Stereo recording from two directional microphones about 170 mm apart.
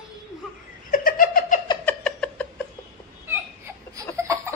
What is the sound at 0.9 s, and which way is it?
Giggle, 55° left (ahead or behind).